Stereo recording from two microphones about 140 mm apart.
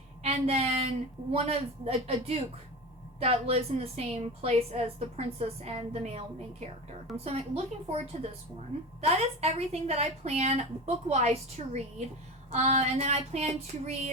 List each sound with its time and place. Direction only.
0.2 s a woman's voice: 45° right (ahead or behind)
7.3 s a woman's voice: 45° right (ahead or behind)